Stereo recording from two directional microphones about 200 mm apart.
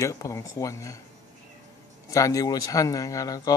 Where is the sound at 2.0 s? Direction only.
15° left (ahead or behind).